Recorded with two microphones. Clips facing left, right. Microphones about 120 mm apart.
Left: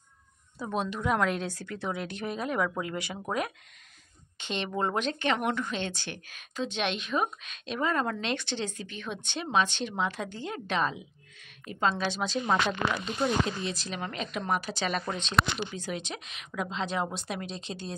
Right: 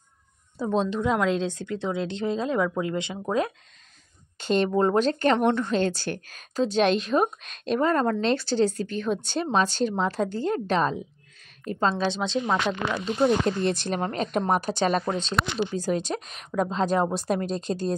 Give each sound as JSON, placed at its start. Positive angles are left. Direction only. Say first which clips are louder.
{"t": 0.6, "sound": "a woman's voice", "louder": "right 7 dB", "side_deg": -25}
{"t": 4.4, "sound": "a woman's voice", "louder": "right 9 dB", "side_deg": -40}
{"t": 11.9, "sound": "a woman's voice", "louder": "right 5 dB", "side_deg": -25}
{"t": 13.5, "sound": "a woman's voice", "louder": "right 9 dB", "side_deg": -55}
{"t": 15.0, "sound": "a woman's voice", "louder": "right 2 dB", "side_deg": -35}